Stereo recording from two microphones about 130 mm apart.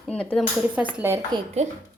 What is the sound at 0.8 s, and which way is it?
Speech, 10° right (ahead or behind).